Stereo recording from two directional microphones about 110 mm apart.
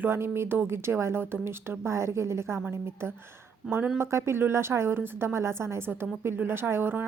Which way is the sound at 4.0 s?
25° right (ahead or behind).